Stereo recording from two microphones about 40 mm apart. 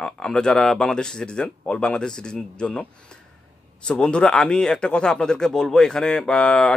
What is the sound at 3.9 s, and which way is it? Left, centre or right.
Speech, left.